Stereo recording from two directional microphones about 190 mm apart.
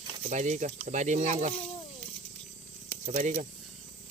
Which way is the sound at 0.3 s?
40° right (ahead or behind).